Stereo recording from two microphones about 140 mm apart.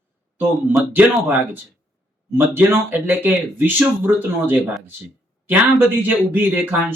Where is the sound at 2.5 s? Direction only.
15° right (ahead or behind).